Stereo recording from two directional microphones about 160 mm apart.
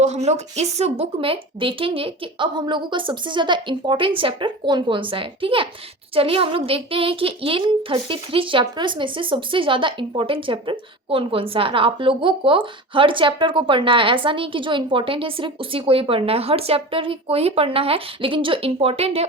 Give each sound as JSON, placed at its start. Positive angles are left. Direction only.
{"t": 0.0, "sound": "a woman's voice", "side_deg": -45}